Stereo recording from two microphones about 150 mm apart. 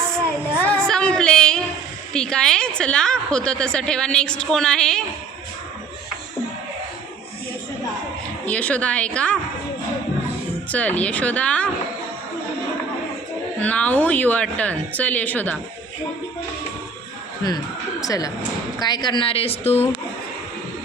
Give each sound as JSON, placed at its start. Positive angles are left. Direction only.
{"t": 0.6, "sound": "a sound", "side_deg": 5}
{"t": 2.1, "sound": "a woman's voice", "side_deg": 5}
{"t": 8.4, "sound": "a woman's voice", "side_deg": 10}
{"t": 10.7, "sound": "a woman's voice", "side_deg": 10}
{"t": 13.6, "sound": "a woman's voice", "side_deg": 10}
{"t": 18.0, "sound": "a woman's voice", "side_deg": 25}